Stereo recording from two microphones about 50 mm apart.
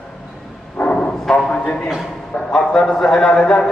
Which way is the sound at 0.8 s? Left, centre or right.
Left.